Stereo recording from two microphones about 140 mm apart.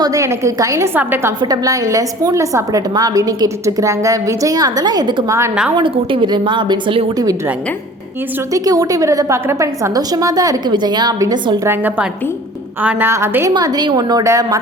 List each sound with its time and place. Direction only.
0.0 s a woman's voice: 25° right (ahead or behind)
1.4 s a woman's voice: 25° right (ahead or behind)
8.5 s a woman's voice: 25° right (ahead or behind)
12.8 s a woman's voice: 15° right (ahead or behind)
13.5 s a woman's voice: 30° right (ahead or behind)